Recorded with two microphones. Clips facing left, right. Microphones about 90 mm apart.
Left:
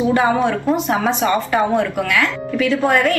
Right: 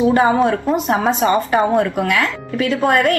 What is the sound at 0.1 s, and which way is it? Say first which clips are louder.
A woman's voice: right 2 dB; 30° right (ahead or behind).